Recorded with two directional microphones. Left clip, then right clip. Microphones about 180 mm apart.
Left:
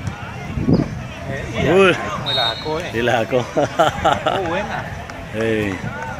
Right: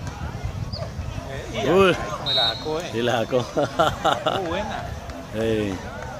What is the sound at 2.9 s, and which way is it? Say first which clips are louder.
Speech: left 5 dB; 5° right (ahead or behind).